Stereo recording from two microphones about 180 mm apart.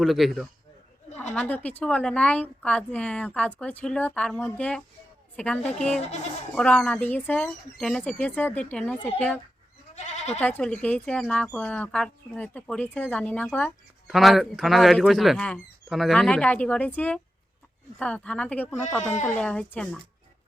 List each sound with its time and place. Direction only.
0.0 s a woman's voice: centre (ahead or behind)
9.9 s goat: 40° left (ahead or behind)
10.4 s a woman's voice: 5° left (ahead or behind)